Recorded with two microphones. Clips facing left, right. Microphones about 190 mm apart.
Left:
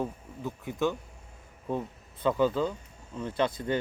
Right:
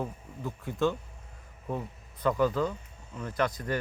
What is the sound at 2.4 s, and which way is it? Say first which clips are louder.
Speech: left 1 dB; 25° left (ahead or behind).